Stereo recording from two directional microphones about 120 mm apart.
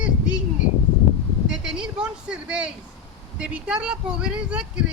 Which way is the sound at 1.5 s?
5° right (ahead or behind).